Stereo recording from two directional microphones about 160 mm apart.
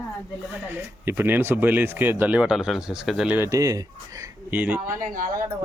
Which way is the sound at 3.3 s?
20° right (ahead or behind).